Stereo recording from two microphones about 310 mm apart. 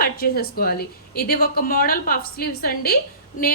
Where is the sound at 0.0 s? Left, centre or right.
Left.